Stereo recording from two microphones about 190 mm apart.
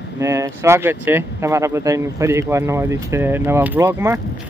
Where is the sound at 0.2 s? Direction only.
15° right (ahead or behind).